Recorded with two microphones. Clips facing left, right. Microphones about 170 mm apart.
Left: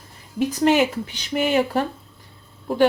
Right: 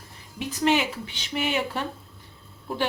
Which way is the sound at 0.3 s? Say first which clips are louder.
Left 6 dB; 45° left (ahead or behind).